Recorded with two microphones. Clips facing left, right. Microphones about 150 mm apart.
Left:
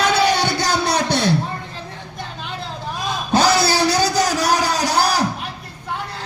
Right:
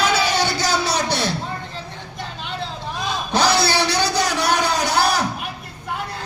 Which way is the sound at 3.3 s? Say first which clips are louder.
Left 2 dB; 45° left (ahead or behind).